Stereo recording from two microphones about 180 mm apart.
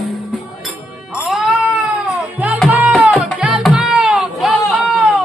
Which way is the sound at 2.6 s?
5° right (ahead or behind).